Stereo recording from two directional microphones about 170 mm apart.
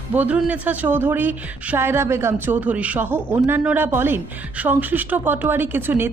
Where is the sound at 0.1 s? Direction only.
10° right (ahead or behind).